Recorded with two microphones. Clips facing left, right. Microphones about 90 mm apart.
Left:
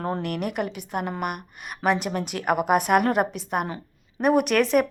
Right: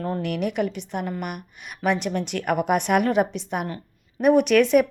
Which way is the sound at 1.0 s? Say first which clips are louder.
Left 1 dB; 50° left (ahead or behind).